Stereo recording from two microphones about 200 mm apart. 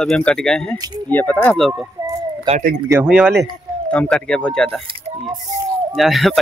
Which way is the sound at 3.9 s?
5° left (ahead or behind).